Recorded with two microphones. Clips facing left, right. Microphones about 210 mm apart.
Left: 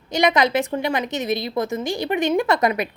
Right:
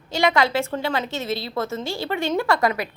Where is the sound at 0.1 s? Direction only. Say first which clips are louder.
Left 2 dB; 20° left (ahead or behind).